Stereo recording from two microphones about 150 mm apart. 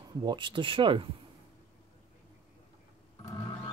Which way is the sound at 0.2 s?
30° right (ahead or behind).